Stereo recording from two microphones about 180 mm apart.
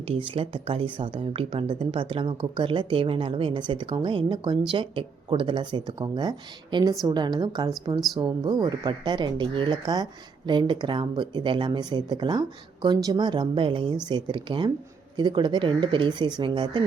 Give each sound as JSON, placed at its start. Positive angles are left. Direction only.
{"t": 0.1, "sound": "speech", "side_deg": -30}